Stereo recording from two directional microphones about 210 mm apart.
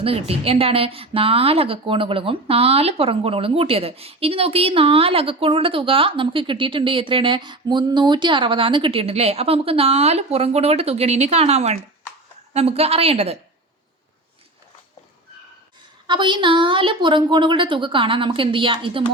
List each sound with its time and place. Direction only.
0.0 s a woman's voice: 25° right (ahead or behind)
16.0 s a woman's voice: 20° right (ahead or behind)